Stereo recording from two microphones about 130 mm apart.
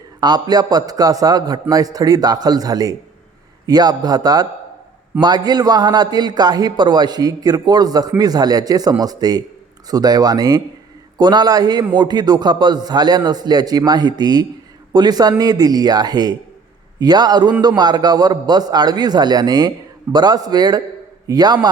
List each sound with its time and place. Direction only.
0.2 s a man's voice: 30° right (ahead or behind)